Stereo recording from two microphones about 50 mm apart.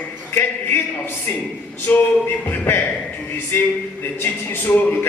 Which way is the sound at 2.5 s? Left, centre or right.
Left.